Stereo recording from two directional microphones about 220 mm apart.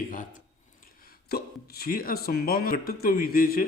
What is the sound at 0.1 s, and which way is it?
Speech, 35° left (ahead or behind).